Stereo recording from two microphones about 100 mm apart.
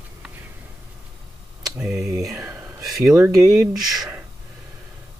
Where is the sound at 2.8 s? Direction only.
35° right (ahead or behind).